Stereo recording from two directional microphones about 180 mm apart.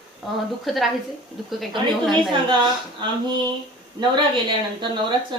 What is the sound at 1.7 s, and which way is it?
Speech, 25° right (ahead or behind).